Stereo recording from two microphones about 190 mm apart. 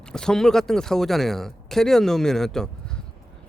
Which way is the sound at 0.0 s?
5° left (ahead or behind).